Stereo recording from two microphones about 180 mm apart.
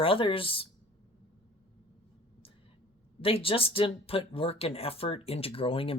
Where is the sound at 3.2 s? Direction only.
30° left (ahead or behind).